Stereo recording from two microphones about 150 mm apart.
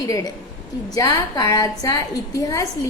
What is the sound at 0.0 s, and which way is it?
A woman's voice, 20° left (ahead or behind).